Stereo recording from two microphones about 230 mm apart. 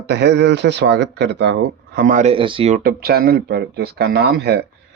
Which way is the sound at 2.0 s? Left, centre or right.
Right.